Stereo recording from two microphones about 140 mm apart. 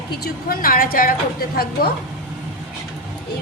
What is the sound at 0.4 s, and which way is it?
A woman's voice, 90° left.